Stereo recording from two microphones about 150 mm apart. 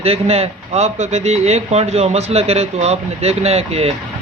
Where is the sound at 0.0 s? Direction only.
40° right (ahead or behind).